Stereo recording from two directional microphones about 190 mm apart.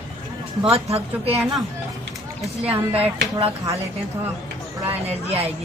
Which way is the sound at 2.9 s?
30° right (ahead or behind).